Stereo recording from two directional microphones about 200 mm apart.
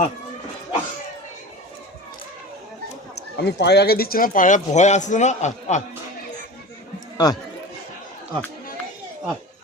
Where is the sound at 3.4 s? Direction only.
55° left (ahead or behind); by 5.8 s 35° left (ahead or behind).